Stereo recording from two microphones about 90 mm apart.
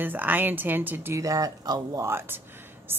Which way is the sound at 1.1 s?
40° right (ahead or behind).